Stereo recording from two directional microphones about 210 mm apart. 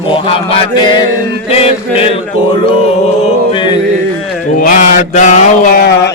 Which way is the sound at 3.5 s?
20° left (ahead or behind).